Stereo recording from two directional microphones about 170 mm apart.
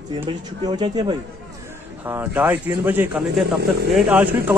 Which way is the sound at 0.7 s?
25° right (ahead or behind).